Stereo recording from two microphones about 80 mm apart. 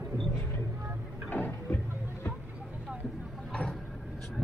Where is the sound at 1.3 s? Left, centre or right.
Left.